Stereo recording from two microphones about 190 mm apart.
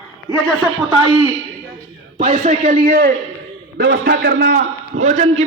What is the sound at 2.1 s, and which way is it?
Speech, 40° right (ahead or behind).